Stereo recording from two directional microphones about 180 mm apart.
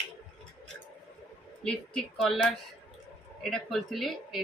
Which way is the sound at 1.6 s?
5° left (ahead or behind).